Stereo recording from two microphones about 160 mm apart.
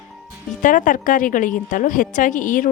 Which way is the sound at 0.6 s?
55° left (ahead or behind).